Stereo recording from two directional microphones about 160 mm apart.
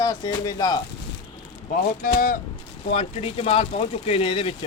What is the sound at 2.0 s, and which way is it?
Speech, 60° left (ahead or behind).